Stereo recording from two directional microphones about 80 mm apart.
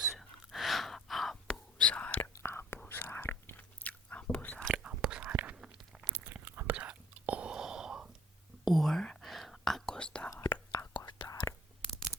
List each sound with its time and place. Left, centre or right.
0.0 s whispering: centre
1.8 s whispering: centre
2.3 s whispering: left
2.9 s chewing: left
4.7 s whispering: centre
5.7 s a sound: centre
6.1 s whispering: right; by 10.2 s centre
10.7 s whispering: left